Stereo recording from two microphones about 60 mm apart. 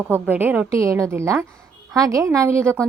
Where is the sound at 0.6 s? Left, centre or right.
Right.